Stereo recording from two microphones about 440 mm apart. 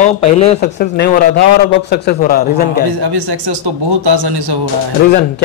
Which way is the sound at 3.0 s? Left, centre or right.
Right.